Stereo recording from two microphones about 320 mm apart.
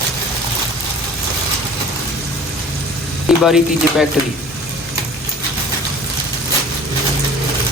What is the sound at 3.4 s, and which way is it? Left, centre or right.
Speech, centre.